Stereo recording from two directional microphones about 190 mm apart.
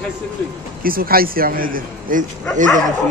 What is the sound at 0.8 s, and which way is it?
A man's voice, 50° right (ahead or behind).